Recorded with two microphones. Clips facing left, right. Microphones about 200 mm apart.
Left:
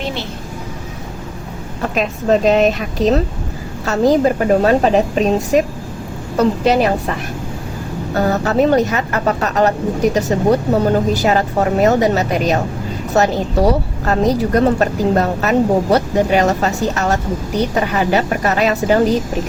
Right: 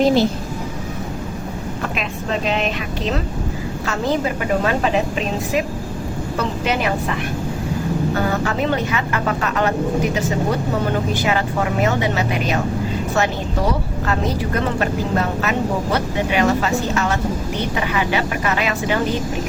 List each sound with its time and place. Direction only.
0.0 s a woman's voice: 40° right (ahead or behind)
1.8 s a woman's voice: 40° left (ahead or behind)